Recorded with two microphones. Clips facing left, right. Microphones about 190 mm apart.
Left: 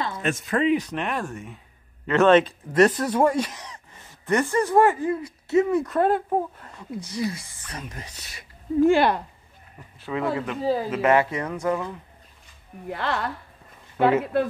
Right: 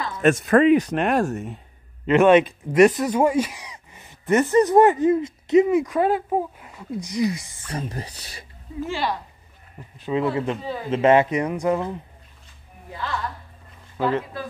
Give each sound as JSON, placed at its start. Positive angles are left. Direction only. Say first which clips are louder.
{"t": 0.2, "sound": "speech", "louder": "right 9 dB", "side_deg": -55}
{"t": 2.0, "sound": "speech", "louder": "right 2 dB", "side_deg": -15}
{"t": 5.9, "sound": "speech", "louder": "right 1 dB", "side_deg": -5}
{"t": 8.8, "sound": "speech", "louder": "left 8 dB", "side_deg": 55}
{"t": 9.9, "sound": "speech", "louder": "right 3 dB", "side_deg": -20}
{"t": 10.6, "sound": "speech", "louder": "left 7 dB", "side_deg": 35}
{"t": 10.9, "sound": "speech", "louder": "right 7 dB", "side_deg": -25}
{"t": 12.9, "sound": "a woman's voice", "louder": "left 2 dB", "side_deg": 65}